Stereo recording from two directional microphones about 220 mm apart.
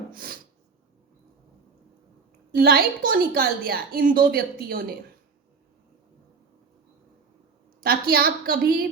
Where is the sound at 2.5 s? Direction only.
45° right (ahead or behind).